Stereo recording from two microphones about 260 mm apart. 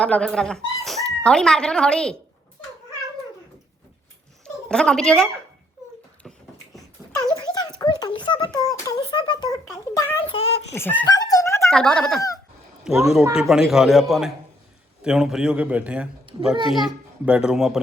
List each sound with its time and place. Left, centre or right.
0.0 s speech: centre
4.4 s a woman's voice: centre
7.3 s a sound: centre
10.8 s a man's voice: centre
16.3 s a sound: centre
16.6 s a child's voice: centre